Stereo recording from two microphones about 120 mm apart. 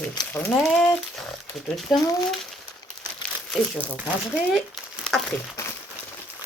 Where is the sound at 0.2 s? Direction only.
35° left (ahead or behind).